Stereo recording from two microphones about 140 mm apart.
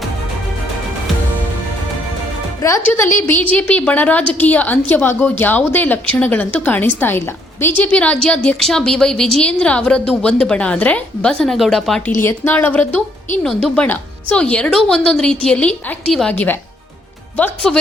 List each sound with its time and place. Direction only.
2.6 s a woman's voice: 20° left (ahead or behind); by 12.1 s 5° left (ahead or behind)
12.2 s a woman's voice: 15° left (ahead or behind)